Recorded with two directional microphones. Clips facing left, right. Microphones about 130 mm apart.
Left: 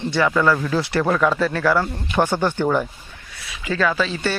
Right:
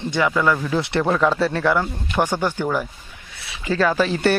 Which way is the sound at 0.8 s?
25° right (ahead or behind).